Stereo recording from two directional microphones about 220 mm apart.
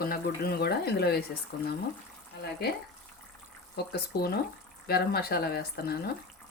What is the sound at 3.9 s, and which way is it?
Speech, 45° left (ahead or behind).